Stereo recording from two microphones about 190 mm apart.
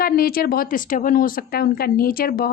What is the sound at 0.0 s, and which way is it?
A woman's voice, 50° left (ahead or behind).